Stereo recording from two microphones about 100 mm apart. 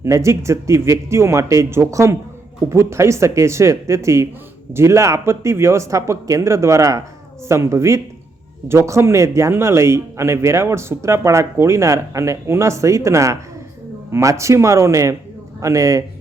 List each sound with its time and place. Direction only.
0.0 s a man's voice: 30° right (ahead or behind)